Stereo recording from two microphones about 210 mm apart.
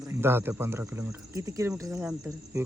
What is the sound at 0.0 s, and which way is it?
Speech, 10° right (ahead or behind).